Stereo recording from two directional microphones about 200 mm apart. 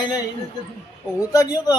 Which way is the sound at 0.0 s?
20° left (ahead or behind).